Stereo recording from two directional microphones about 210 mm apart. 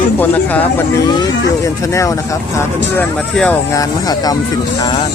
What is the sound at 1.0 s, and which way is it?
Speech, 20° left (ahead or behind).